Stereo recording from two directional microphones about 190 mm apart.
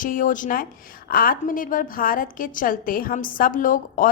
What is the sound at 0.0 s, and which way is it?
A woman's voice, 45° left (ahead or behind).